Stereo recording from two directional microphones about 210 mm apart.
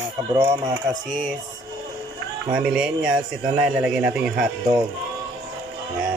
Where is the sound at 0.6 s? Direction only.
15° right (ahead or behind).